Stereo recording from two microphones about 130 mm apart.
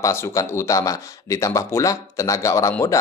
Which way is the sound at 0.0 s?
20° left (ahead or behind).